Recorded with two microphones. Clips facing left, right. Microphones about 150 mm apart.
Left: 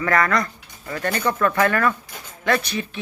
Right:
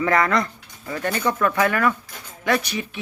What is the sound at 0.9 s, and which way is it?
Speech, 10° right (ahead or behind).